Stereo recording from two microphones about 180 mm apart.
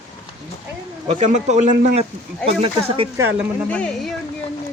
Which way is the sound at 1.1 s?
40° right (ahead or behind).